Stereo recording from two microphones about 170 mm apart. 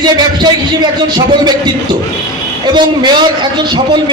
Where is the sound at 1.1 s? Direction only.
25° right (ahead or behind).